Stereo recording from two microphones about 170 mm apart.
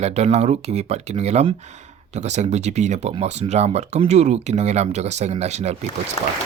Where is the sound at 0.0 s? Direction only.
40° right (ahead or behind).